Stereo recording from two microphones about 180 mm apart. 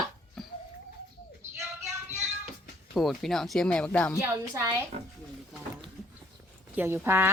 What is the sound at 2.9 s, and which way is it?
Speech, centre (ahead or behind).